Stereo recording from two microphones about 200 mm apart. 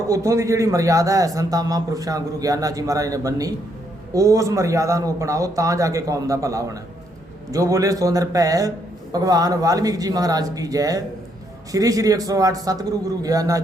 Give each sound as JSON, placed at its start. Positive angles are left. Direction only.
{"t": 0.1, "sound": "a man's voice", "side_deg": -15}